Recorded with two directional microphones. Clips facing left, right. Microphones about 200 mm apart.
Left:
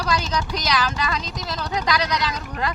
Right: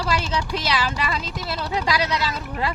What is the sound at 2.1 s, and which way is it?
Speech, 5° right (ahead or behind).